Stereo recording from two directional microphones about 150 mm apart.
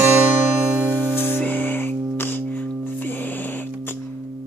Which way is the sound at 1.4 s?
10° left (ahead or behind).